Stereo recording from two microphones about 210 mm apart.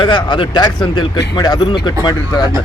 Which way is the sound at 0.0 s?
20° left (ahead or behind).